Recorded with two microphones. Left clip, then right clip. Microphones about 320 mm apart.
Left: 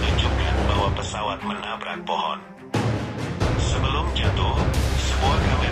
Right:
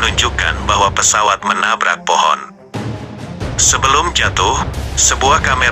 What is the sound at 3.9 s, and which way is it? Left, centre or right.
Speech, right.